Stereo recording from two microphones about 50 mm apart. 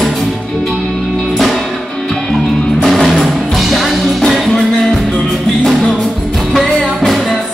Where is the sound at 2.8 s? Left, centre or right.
Centre.